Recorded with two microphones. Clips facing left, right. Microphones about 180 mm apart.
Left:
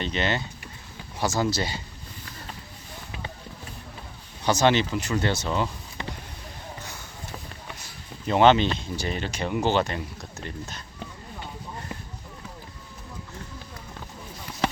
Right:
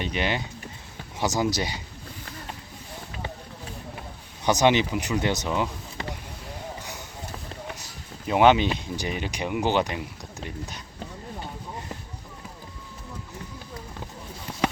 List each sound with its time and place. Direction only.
0.0 s speech: 10° right (ahead or behind)
4.4 s speech: 15° right (ahead or behind)
8.3 s speech: 10° right (ahead or behind)